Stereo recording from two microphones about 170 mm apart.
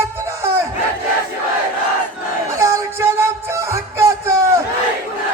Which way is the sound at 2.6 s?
15° right (ahead or behind).